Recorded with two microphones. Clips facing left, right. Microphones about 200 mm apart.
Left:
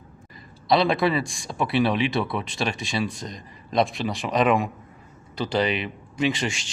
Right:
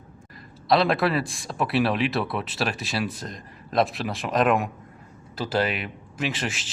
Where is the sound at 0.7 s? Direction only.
Centre (ahead or behind).